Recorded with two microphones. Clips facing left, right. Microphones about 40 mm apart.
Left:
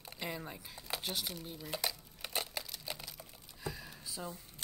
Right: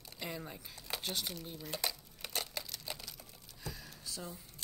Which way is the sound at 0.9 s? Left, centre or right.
Centre.